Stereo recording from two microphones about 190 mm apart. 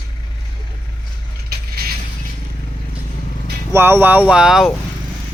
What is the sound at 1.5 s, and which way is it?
Mechanisms, 55° right (ahead or behind).